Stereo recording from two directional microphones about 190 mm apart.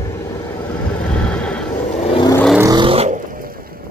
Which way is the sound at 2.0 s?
30° left (ahead or behind).